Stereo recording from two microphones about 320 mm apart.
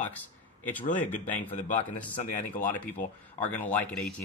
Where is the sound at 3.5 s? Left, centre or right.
Centre.